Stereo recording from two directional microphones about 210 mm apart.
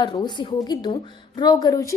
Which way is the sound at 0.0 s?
20° left (ahead or behind).